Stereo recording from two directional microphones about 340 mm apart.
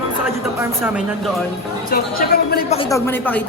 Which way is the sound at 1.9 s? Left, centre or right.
Left.